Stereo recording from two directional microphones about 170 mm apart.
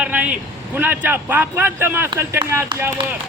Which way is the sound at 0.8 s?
10° right (ahead or behind).